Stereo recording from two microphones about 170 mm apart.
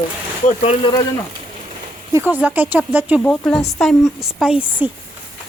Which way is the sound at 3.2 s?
10° left (ahead or behind).